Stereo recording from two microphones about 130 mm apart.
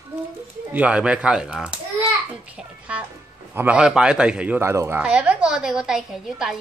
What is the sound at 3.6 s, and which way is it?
Speech, 10° right (ahead or behind).